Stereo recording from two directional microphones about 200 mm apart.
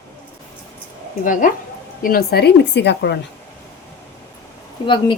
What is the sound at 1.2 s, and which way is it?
A woman's voice, 40° left (ahead or behind).